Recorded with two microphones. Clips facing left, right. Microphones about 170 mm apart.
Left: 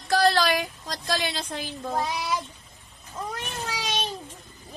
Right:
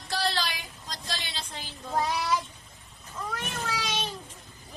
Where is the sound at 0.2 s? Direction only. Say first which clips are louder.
Left 9 dB; 50° left (ahead or behind).